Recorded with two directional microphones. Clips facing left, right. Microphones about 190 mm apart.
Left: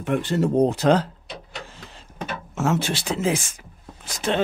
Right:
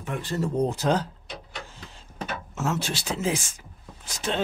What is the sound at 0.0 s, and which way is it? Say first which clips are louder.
Speech: left 7 dB; 75° left (ahead or behind).